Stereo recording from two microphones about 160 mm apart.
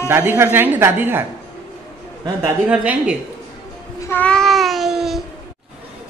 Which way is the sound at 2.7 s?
10° right (ahead or behind).